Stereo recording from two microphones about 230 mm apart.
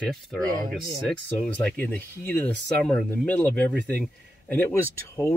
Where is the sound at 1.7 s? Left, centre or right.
Centre.